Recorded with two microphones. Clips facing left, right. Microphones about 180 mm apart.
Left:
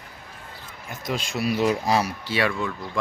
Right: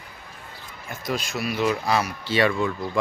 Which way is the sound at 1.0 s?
20° left (ahead or behind).